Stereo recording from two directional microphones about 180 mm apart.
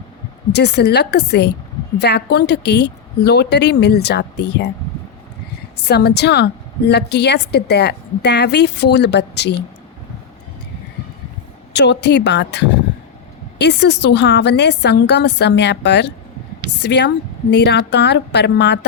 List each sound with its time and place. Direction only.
0.5 s a woman's voice: 65° left (ahead or behind)
5.9 s a woman's voice: 65° left (ahead or behind)
11.7 s a woman's voice: 70° left (ahead or behind)